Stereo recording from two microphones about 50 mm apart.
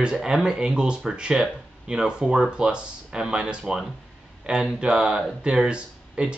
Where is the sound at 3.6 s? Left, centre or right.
Centre.